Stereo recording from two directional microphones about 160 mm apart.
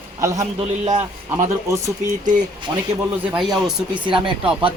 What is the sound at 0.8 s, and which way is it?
Speech, 45° right (ahead or behind).